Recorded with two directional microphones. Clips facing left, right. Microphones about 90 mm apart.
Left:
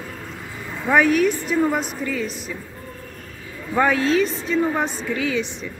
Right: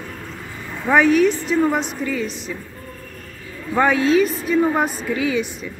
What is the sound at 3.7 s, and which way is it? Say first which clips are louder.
Speech: right 2 dB; 5° right (ahead or behind).